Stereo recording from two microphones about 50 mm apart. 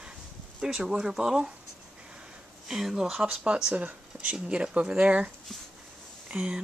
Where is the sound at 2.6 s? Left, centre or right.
Centre.